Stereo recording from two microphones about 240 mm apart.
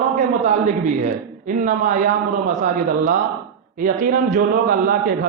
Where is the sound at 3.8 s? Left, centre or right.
Right.